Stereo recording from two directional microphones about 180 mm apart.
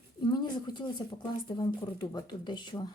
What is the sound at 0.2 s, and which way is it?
Speech, 25° left (ahead or behind).